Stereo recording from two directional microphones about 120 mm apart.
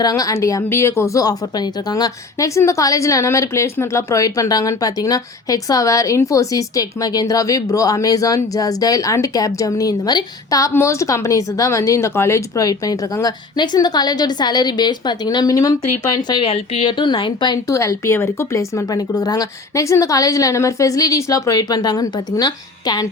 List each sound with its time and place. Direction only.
0.0 s a woman's voice: 30° left (ahead or behind)
16.4 s a woman's voice: 50° left (ahead or behind)
17.7 s a woman's voice: 25° left (ahead or behind)